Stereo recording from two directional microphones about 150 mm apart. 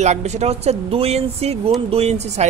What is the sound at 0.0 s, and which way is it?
Speech, 50° right (ahead or behind).